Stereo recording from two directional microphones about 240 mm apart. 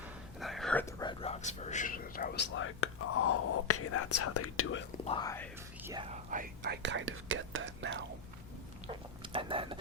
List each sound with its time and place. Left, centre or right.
0.0 s whispering: centre; by 4.9 s left
5.0 s speech: centre
5.8 s whispering: centre
6.1 s whispering: right
6.6 s whispering: right
8.9 s a sound: right